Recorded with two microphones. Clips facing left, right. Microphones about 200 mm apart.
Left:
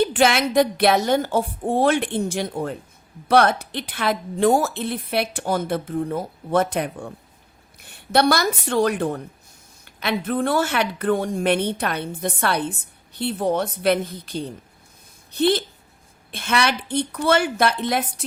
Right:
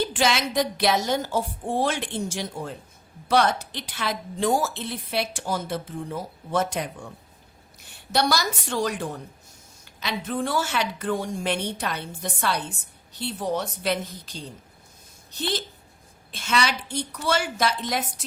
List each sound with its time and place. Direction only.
0.0 s a woman's voice: 60° left (ahead or behind)